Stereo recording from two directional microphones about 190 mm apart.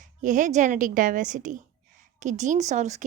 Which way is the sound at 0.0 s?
40° right (ahead or behind).